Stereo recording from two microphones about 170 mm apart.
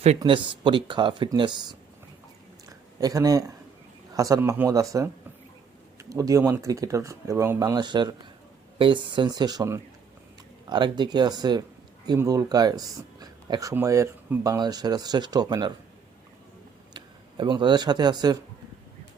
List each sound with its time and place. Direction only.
0.2 s speech: 30° right (ahead or behind)
3.0 s speech: 20° right (ahead or behind)
16.9 s speech: 25° right (ahead or behind)